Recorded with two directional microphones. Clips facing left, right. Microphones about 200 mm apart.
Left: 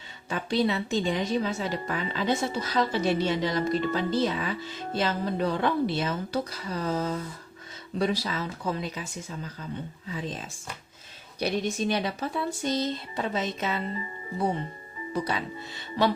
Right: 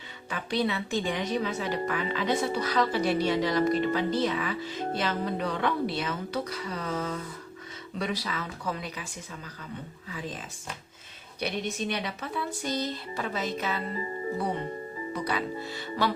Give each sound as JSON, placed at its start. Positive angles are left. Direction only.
{"t": 0.3, "sound": "a woman's voice", "side_deg": 30}
{"t": 15.1, "sound": "a woman's voice", "side_deg": 25}